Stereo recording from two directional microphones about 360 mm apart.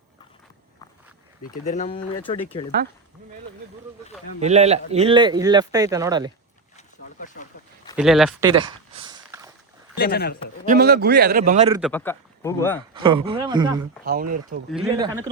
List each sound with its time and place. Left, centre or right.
1.5 s speech: left
4.4 s speech: centre
6.7 s a sound: left
7.9 s speech: centre
8.4 s a sound: centre
9.9 s speech: left
10.7 s a man's voice: right
11.8 s speech: centre
12.9 s speech: centre
14.0 s a man's voice: right
14.7 s speech: centre